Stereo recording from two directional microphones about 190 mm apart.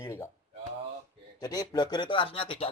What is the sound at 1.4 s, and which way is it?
Speech, 20° left (ahead or behind).